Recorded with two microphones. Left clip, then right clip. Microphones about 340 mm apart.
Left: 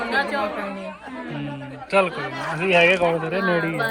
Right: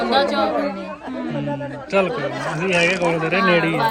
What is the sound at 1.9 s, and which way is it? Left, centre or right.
Speech, centre.